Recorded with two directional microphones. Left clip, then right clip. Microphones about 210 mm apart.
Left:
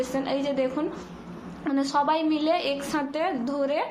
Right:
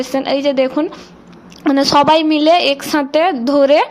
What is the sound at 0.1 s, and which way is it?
A woman's voice, 40° right (ahead or behind).